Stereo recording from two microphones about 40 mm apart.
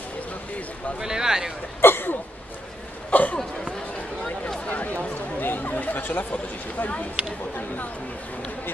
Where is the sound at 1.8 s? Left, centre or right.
Left.